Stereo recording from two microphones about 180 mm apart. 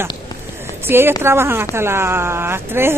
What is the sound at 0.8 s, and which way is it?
Speech, 10° right (ahead or behind).